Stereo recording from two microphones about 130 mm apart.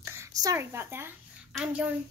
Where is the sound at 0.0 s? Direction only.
20° right (ahead or behind).